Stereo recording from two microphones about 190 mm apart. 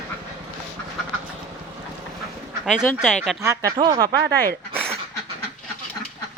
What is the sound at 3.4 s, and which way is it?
Speech, 15° right (ahead or behind).